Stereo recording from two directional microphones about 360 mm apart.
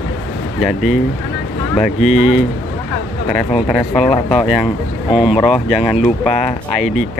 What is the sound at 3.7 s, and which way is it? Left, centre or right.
Speech, centre.